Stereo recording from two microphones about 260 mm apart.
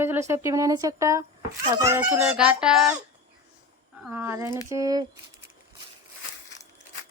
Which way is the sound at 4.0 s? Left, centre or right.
Centre.